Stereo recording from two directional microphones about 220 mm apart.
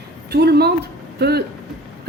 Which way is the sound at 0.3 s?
45° right (ahead or behind).